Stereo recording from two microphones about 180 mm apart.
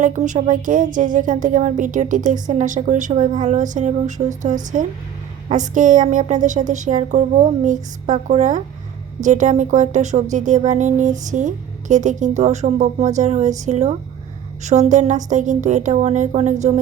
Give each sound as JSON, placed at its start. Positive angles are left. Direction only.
{"t": 0.0, "sound": "a woman's voice", "side_deg": -45}